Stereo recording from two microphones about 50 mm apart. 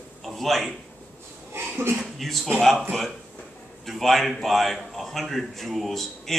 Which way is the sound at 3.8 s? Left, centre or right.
Centre.